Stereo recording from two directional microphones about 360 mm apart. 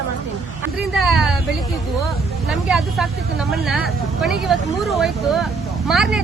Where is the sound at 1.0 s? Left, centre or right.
Centre.